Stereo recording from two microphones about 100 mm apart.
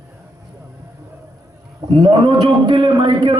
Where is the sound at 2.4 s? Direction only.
50° right (ahead or behind).